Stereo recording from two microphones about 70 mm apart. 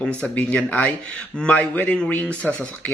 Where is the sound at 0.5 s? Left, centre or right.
Left.